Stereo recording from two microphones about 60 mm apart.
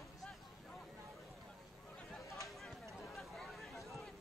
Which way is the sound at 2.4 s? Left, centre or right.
Centre.